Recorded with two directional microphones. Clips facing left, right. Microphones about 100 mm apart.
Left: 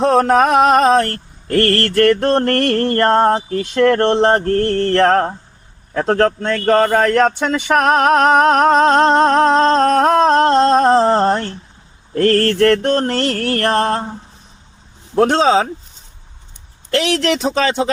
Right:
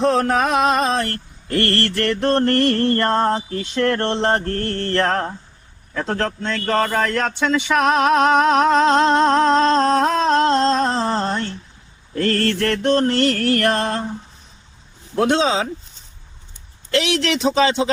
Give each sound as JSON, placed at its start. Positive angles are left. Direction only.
{"t": 0.0, "sound": "mantra", "side_deg": 50}
{"t": 9.6, "sound": "a sound", "side_deg": 50}
{"t": 12.1, "sound": "mantra", "side_deg": 45}
{"t": 15.2, "sound": "mantra", "side_deg": 40}
{"t": 16.9, "sound": "mantra", "side_deg": 50}